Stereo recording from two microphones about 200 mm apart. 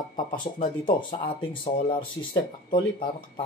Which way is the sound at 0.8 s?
25° left (ahead or behind).